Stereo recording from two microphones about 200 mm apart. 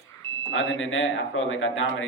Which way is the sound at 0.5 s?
75° left (ahead or behind).